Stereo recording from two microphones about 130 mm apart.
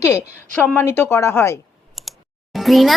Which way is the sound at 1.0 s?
20° left (ahead or behind).